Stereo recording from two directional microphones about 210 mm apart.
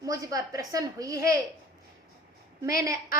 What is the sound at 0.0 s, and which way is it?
A woman's voice, 15° right (ahead or behind).